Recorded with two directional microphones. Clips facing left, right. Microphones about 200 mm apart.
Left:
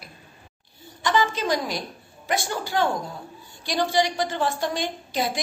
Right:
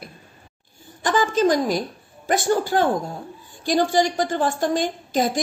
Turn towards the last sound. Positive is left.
turn(degrees=-45)  # may be behind; listen again after turning